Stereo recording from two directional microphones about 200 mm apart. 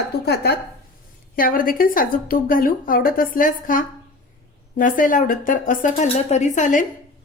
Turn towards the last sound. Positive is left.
turn(degrees=40)  # may be behind; listen again after turning